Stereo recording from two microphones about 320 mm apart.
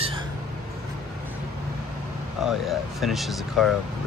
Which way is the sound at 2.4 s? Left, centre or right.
Centre.